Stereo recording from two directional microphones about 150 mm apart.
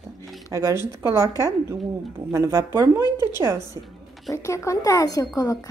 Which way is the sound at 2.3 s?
20° right (ahead or behind).